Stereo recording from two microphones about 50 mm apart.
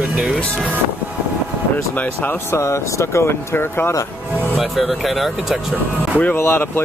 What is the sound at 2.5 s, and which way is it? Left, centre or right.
Speech, left.